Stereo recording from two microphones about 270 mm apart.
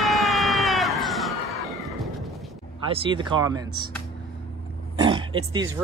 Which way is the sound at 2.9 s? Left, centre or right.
Centre.